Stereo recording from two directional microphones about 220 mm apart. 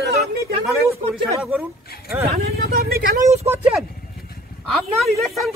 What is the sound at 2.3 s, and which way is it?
Speech, 45° right (ahead or behind).